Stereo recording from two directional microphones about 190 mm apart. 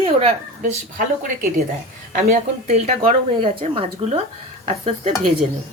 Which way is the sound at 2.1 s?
40° right (ahead or behind).